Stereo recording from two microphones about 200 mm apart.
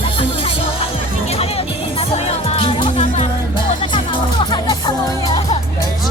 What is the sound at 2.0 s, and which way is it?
Music, 30° left (ahead or behind).